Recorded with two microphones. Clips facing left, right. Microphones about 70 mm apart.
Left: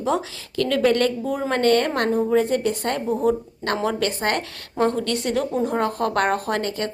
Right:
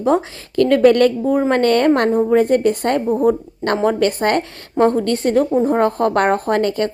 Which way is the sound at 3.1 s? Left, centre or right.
Right.